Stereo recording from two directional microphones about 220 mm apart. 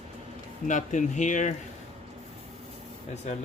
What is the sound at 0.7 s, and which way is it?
Speech, 35° left (ahead or behind).